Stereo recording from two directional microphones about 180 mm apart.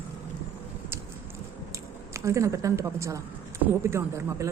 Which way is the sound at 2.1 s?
15° right (ahead or behind).